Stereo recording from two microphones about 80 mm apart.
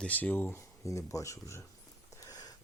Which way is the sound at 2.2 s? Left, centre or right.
Left.